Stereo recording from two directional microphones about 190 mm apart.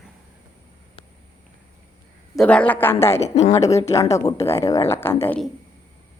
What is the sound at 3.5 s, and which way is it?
Speech, 15° left (ahead or behind).